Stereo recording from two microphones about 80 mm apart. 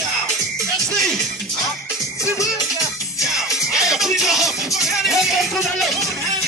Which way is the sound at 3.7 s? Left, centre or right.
Centre.